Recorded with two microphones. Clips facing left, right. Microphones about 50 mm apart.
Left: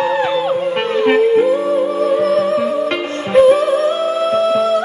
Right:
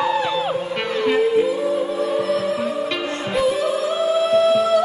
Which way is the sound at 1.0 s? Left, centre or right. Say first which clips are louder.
Left 5 dB; left.